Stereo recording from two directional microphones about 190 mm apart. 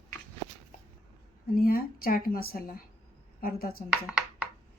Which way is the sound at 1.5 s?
50° left (ahead or behind).